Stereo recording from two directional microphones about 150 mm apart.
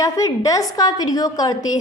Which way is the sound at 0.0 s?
25° left (ahead or behind).